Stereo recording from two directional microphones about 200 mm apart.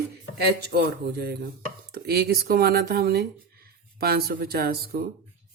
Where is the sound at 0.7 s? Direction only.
55° right (ahead or behind).